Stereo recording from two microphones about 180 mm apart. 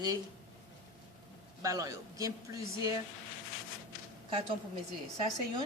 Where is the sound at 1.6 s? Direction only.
20° right (ahead or behind).